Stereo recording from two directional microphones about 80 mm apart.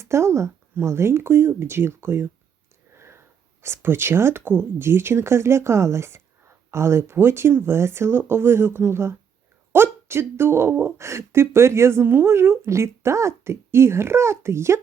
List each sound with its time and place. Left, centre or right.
0.0 s speech: right
2.9 s sniff: right
3.6 s speech: right